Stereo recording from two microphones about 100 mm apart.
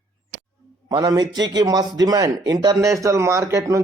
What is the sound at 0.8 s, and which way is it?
A man's voice, 35° right (ahead or behind).